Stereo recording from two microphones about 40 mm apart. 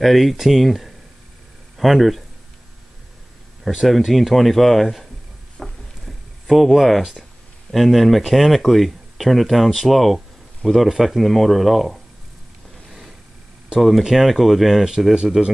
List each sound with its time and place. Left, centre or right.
0.0 s speech: centre
3.9 s speech: centre
5.6 s a sound: centre
6.5 s speech: centre
13.7 s speech: centre
15.4 s speech: right